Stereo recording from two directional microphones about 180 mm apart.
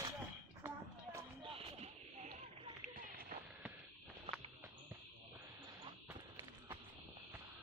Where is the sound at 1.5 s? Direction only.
35° right (ahead or behind).